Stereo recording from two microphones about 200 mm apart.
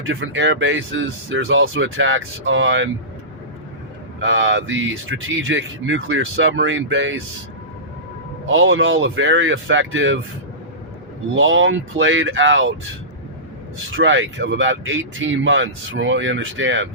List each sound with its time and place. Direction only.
0.0 s speech: 70° right (ahead or behind)
4.2 s speech: 65° right (ahead or behind)
8.4 s speech: 80° right
11.3 s speech: 75° right (ahead or behind)
13.9 s speech: 70° right (ahead or behind)